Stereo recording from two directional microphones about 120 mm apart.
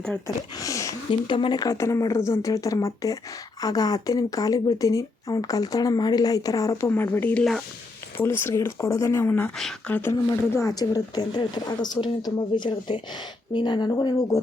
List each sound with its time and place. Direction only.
0.5 s a sound: 30° left (ahead or behind)
1.3 s speech: 40° left (ahead or behind)
6.9 s speech: 15° left (ahead or behind)
9.6 s speech: centre (ahead or behind)
9.9 s speech: 20° left (ahead or behind)